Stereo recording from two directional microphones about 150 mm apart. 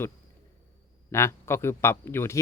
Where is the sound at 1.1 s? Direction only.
15° left (ahead or behind).